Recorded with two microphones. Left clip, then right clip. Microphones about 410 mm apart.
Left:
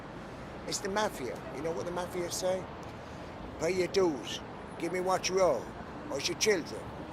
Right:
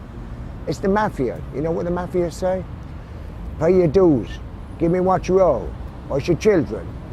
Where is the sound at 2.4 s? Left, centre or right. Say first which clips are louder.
Right 9 dB; right.